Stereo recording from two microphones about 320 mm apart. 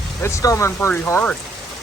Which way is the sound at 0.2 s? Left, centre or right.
Centre.